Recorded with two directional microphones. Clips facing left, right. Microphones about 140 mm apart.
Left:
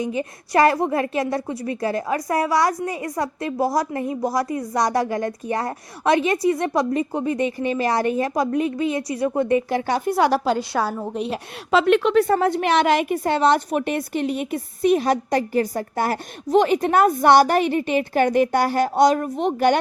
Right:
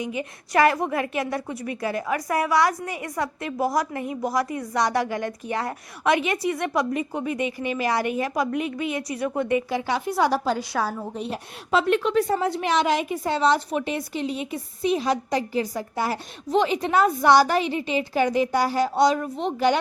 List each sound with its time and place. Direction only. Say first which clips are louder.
0.2 s a woman's voice: left 2 dB; 35° left (ahead or behind)
7.3 s speech: left 4 dB; 15° right (ahead or behind)
8.2 s a woman's voice: left 4 dB; 35° left (ahead or behind)
9.6 s speech: left 4 dB; 50° left (ahead or behind)
10.2 s a woman's voice: left 3 dB; 75° left (ahead or behind); by 19.8 s 55° left (ahead or behind)